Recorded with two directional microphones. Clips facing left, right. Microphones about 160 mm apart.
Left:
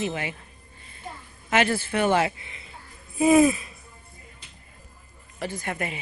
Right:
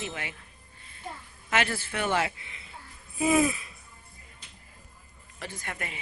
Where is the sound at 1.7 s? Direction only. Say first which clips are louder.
Left 7 dB; 30° left (ahead or behind).